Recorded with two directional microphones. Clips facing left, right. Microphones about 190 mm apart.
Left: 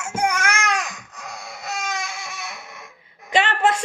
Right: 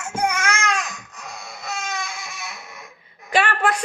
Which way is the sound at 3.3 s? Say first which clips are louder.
Left 1 dB; 20° left (ahead or behind).